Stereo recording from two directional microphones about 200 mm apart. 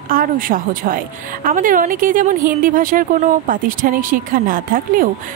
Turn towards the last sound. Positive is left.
turn(degrees=-45)  # may be behind; listen again after turning